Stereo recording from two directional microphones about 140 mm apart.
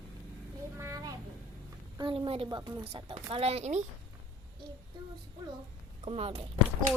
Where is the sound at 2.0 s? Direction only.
35° right (ahead or behind).